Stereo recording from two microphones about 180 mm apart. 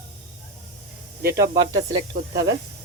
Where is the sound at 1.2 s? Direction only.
15° right (ahead or behind).